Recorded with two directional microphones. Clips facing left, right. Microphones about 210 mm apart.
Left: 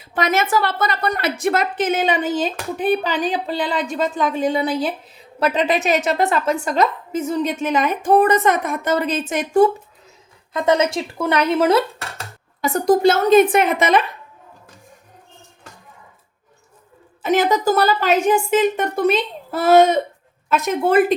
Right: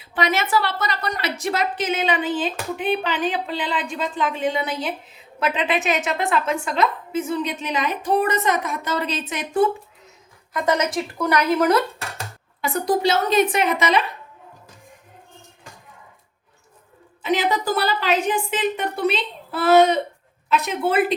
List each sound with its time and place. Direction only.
0.0 s a woman's voice: 45° left (ahead or behind)
10.5 s speech: 25° left (ahead or behind)
12.6 s a woman's voice: 45° left (ahead or behind)
17.2 s a woman's voice: 45° left (ahead or behind)